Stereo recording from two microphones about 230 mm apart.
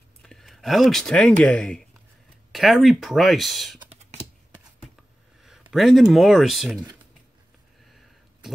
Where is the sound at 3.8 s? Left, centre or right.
Right.